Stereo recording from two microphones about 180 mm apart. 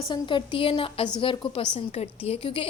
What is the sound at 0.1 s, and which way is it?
A woman's voice, 25° left (ahead or behind).